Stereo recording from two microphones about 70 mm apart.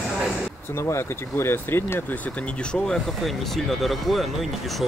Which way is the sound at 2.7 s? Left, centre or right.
Centre.